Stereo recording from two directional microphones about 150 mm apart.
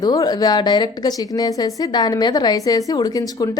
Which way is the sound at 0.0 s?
25° left (ahead or behind).